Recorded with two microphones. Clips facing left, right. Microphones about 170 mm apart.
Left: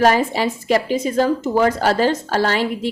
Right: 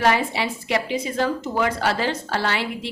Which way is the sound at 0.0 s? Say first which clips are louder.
Left 5 dB; 45° left (ahead or behind).